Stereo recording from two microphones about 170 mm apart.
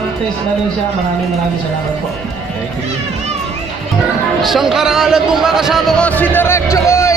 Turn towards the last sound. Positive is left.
turn(degrees=15)  # may be behind; listen again after turning